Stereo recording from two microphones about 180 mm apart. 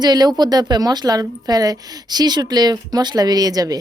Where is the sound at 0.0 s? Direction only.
20° right (ahead or behind).